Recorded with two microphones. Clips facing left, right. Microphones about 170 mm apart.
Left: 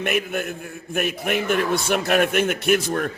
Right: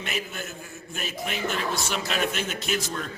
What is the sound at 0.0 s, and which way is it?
A man's voice, 60° left (ahead or behind).